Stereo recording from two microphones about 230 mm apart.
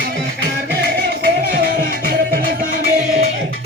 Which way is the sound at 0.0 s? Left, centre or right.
Right.